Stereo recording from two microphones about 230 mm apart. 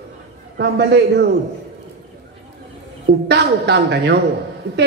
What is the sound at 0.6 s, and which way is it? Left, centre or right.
Speech, right.